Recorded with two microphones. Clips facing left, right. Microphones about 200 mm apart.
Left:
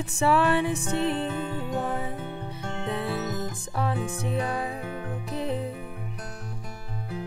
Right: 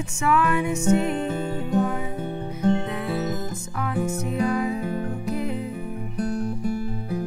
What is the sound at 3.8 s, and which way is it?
Music, 30° left (ahead or behind).